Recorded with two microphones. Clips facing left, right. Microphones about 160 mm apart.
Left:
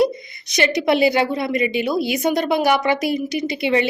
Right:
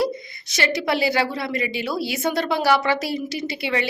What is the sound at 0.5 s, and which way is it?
A woman's voice, 20° left (ahead or behind).